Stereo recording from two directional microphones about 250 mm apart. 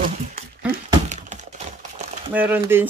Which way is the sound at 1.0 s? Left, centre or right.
Right.